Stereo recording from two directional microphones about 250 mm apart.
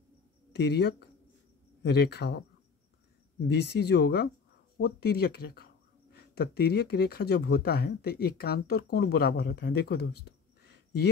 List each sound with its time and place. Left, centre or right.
0.6 s speech: left